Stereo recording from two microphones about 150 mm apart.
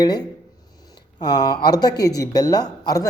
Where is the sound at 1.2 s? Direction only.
30° left (ahead or behind).